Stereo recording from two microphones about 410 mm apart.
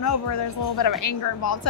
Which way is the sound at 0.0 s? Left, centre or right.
Left.